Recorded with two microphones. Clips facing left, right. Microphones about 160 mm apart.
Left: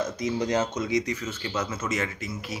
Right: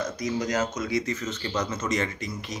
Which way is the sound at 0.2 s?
30° left (ahead or behind).